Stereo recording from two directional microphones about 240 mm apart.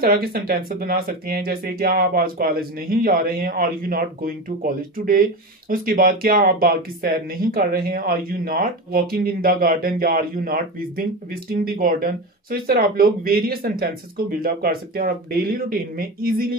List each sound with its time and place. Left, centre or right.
0.0 s speech: right